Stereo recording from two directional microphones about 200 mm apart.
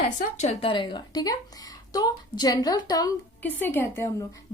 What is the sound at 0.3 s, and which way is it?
A woman's voice, 30° left (ahead or behind).